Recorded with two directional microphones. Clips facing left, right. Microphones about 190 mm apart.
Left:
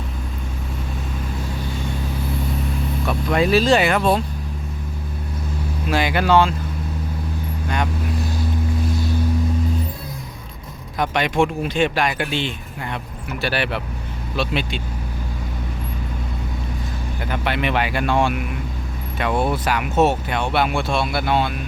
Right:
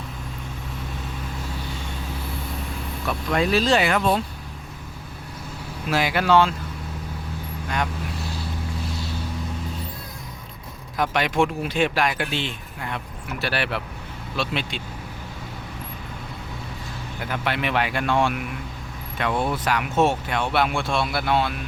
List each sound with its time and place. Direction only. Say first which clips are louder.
3.3 s speech: left 4 dB; 10° left (ahead or behind)
3.9 s speech: left 3 dB; 35° left (ahead or behind)
5.9 s speech: left 2 dB; 5° right (ahead or behind)
10.9 s speech: left 2 dB; centre (ahead or behind)
17.2 s speech: left 3 dB; centre (ahead or behind)
19.3 s speech: left 4 dB; 30° left (ahead or behind)
19.6 s speech: left 1 dB; 5° left (ahead or behind)